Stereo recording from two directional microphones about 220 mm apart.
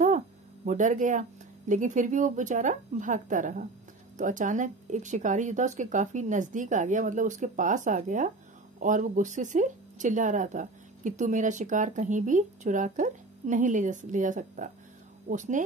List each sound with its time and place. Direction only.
0.7 s speech: 35° right (ahead or behind)